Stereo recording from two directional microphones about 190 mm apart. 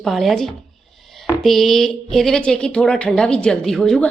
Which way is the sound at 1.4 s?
Centre (ahead or behind).